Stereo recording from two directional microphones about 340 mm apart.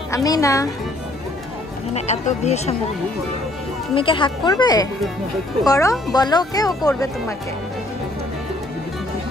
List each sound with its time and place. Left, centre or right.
0.1 s speech: centre
2.0 s speech: centre
3.9 s speech: centre